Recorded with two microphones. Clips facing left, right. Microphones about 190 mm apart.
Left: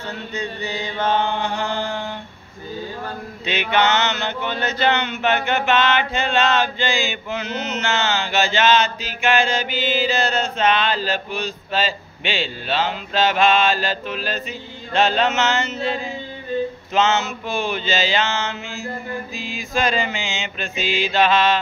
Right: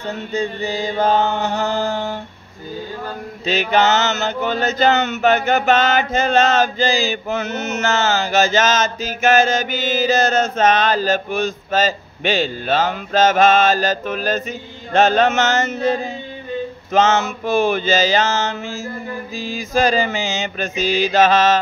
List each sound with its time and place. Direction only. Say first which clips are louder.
0.3 s chant: right 6 dB; 30° right (ahead or behind)
3.4 s mantra: right 3 dB; 40° right (ahead or behind)
17.6 s mantra: right 5 dB; 45° right (ahead or behind)
20.0 s chant: right 5 dB; 40° right (ahead or behind)